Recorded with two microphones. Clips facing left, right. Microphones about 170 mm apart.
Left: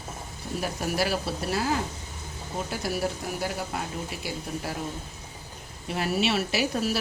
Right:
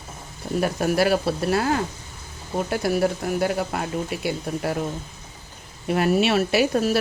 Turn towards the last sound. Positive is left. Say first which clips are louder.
# right 7 dB
turn(degrees=-55)  # may be behind; listen again after turning